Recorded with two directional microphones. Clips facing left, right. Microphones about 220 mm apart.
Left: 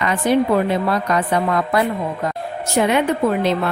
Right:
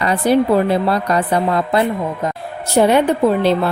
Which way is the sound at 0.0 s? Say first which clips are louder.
Right 2 dB; 35° right (ahead or behind).